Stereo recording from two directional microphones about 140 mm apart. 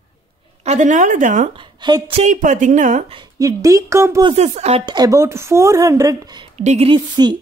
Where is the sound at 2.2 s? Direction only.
60° right (ahead or behind).